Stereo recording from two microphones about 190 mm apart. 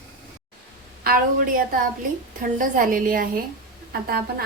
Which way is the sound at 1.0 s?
50° right (ahead or behind).